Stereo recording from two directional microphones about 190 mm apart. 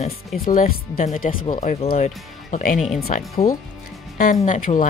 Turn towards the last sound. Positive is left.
turn(degrees=40)  # may be behind; listen again after turning